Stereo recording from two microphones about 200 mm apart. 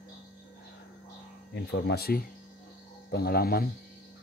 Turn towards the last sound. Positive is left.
turn(degrees=50)  # may be behind; listen again after turning